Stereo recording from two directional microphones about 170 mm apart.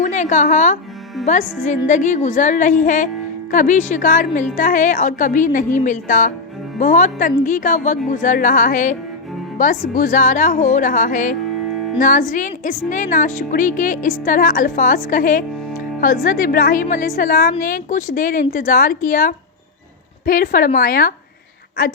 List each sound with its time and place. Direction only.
0.0 s a woman's voice: 45° left (ahead or behind)